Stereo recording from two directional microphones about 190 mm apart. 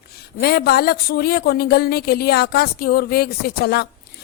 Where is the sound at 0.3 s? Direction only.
55° left (ahead or behind).